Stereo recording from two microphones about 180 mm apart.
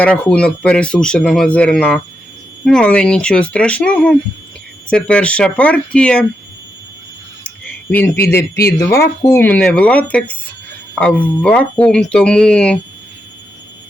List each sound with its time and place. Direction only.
0.0 s speech: 5° left (ahead or behind)
7.9 s speech: 10° left (ahead or behind)
8.4 s speech: 60° left (ahead or behind)
9.2 s speech: 15° left (ahead or behind)